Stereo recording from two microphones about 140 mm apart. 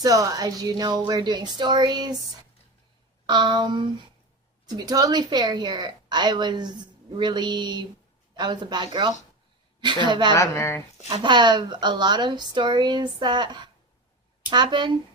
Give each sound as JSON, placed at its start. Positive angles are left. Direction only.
{"t": 0.0, "sound": "a woman's voice", "side_deg": -25}
{"t": 3.2, "sound": "a woman's voice", "side_deg": -30}
{"t": 10.3, "sound": "speech", "side_deg": 20}
{"t": 11.1, "sound": "a woman's voice", "side_deg": -35}